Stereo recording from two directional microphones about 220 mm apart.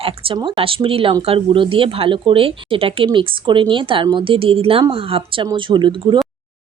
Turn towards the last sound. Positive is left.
turn(degrees=-20)  # may be behind; listen again after turning